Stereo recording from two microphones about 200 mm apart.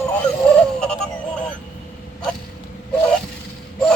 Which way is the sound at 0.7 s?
5° left (ahead or behind).